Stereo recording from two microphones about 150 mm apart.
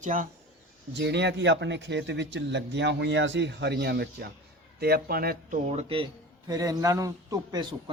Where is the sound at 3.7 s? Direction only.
90° right.